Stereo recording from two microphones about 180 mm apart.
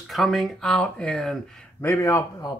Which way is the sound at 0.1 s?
Centre (ahead or behind).